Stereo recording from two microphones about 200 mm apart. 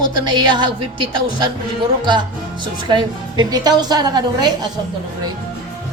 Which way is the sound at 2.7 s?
25° right (ahead or behind).